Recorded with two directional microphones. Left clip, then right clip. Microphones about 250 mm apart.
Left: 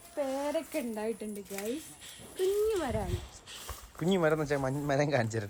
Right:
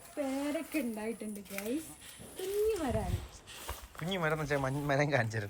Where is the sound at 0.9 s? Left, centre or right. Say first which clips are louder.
Left 4 dB; centre.